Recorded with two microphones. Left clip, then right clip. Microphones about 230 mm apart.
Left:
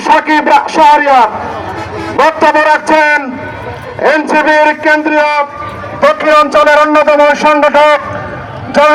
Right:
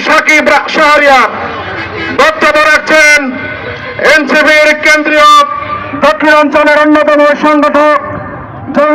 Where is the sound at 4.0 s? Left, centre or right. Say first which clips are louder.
Right 3 dB; left.